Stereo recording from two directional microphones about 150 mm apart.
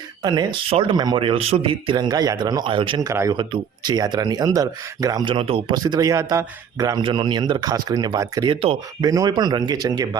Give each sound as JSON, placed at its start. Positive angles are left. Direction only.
{"t": 0.2, "sound": "speech", "side_deg": -30}
{"t": 3.1, "sound": "speech", "side_deg": -20}
{"t": 3.3, "sound": "speech", "side_deg": -30}